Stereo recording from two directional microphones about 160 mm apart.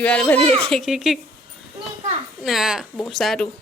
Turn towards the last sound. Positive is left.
turn(degrees=0)  # may be behind; listen again after turning